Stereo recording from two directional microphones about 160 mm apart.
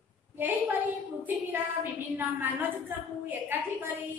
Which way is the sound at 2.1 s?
15° right (ahead or behind).